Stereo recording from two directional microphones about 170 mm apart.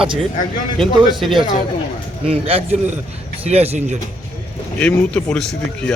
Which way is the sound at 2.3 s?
35° right (ahead or behind).